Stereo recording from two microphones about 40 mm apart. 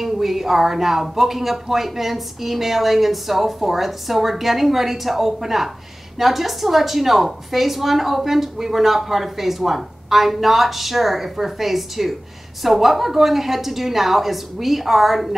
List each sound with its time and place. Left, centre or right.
0.0 s a woman's voice: centre